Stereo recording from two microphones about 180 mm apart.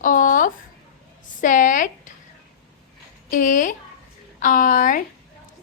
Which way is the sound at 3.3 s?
45° left (ahead or behind).